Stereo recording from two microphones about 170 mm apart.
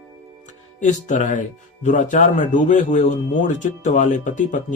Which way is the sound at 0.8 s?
45° left (ahead or behind).